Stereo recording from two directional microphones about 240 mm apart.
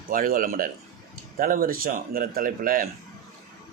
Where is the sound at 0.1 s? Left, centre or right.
Right.